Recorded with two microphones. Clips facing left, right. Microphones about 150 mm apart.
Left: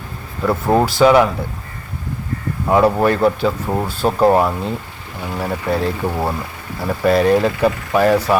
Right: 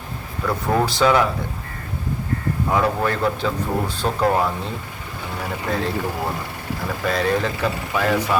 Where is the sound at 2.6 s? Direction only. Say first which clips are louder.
Left 7 dB; 25° left (ahead or behind).